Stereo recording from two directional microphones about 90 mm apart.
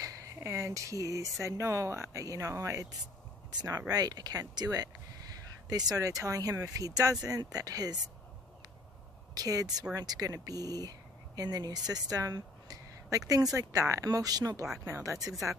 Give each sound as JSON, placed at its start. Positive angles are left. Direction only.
{"t": 0.0, "sound": "speech", "side_deg": -40}
{"t": 9.3, "sound": "speech", "side_deg": -45}
{"t": 11.9, "sound": "a sound", "side_deg": -45}
{"t": 13.6, "sound": "speech", "side_deg": -35}